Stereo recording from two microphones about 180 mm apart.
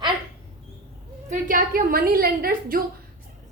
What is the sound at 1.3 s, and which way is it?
A woman's voice, 50° right (ahead or behind).